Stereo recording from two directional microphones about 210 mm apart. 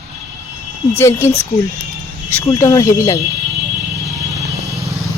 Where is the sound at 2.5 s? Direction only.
15° left (ahead or behind).